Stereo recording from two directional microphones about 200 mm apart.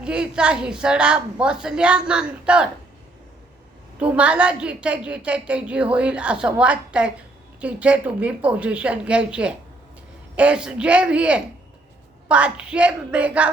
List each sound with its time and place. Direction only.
0.0 s a woman's voice: 5° right (ahead or behind)
4.0 s a woman's voice: 5° right (ahead or behind)